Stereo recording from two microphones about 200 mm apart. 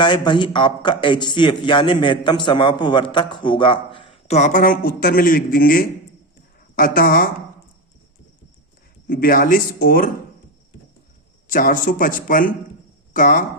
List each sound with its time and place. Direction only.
0.0 s a man's voice: 25° left (ahead or behind); by 7.3 s 45° left (ahead or behind)
9.0 s speech: 45° left (ahead or behind)
11.4 s speech: 40° left (ahead or behind)